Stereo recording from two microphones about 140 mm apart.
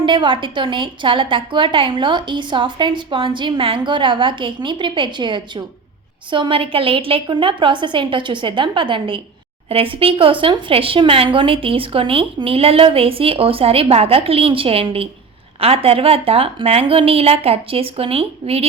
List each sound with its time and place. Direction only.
0.0 s a woman's voice: 35° right (ahead or behind)